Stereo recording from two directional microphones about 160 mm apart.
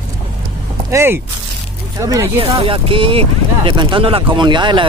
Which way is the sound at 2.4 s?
35° right (ahead or behind).